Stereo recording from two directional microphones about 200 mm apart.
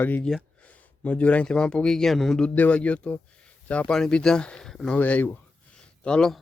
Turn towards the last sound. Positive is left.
turn(degrees=5)  # may be behind; listen again after turning